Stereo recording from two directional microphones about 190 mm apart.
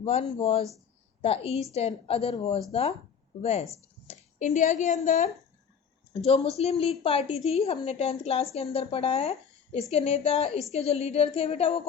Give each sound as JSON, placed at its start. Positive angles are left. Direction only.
{"t": 0.0, "sound": "a woman's voice", "side_deg": 30}